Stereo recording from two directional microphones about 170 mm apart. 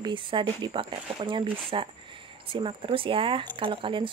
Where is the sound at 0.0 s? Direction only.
30° right (ahead or behind).